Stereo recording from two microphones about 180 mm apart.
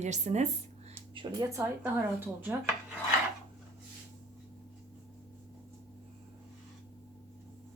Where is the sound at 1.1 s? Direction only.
25° right (ahead or behind).